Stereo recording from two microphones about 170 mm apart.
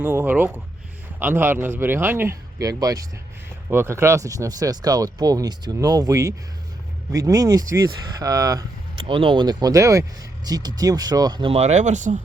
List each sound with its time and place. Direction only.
0.0 s speech: 15° right (ahead or behind)
9.0 s speech: 30° right (ahead or behind); by 12.2 s 45° right (ahead or behind)